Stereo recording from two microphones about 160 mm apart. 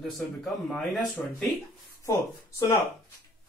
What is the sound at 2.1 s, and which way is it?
Speech, 20° left (ahead or behind).